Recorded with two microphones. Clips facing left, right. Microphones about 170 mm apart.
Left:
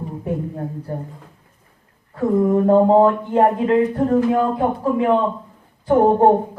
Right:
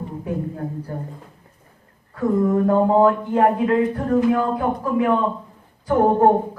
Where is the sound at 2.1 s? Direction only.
20° left (ahead or behind).